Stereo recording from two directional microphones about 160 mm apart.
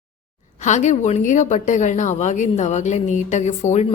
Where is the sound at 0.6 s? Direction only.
50° left (ahead or behind).